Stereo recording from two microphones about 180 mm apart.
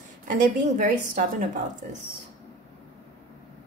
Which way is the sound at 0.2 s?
45° right (ahead or behind).